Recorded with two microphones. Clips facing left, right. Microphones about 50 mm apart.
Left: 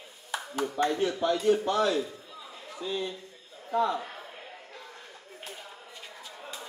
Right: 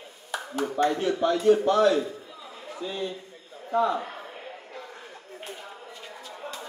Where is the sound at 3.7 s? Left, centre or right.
Centre.